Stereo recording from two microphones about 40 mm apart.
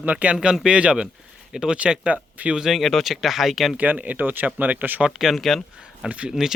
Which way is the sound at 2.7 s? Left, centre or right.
Centre.